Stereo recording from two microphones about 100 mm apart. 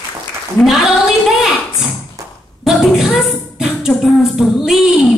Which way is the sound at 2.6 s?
5° right (ahead or behind).